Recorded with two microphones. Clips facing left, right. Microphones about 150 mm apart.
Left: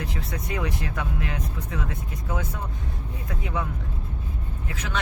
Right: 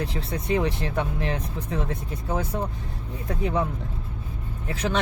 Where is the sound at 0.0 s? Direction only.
30° right (ahead or behind).